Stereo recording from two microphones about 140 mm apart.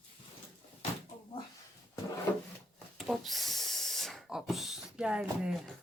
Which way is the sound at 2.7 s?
Centre (ahead or behind).